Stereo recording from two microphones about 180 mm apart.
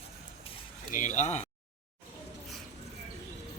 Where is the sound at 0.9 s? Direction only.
45° left (ahead or behind).